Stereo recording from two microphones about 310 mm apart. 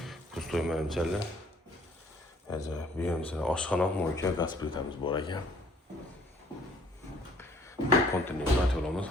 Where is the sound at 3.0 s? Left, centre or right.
Centre.